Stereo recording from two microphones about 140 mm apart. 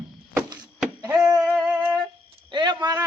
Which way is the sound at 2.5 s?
30° right (ahead or behind).